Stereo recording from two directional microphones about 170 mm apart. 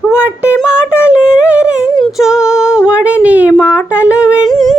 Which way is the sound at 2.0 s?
5° right (ahead or behind).